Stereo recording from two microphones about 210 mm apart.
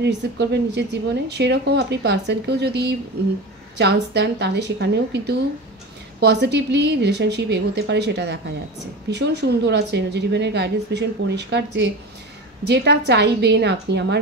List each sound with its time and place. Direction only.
0.0 s a woman's voice: 55° right (ahead or behind)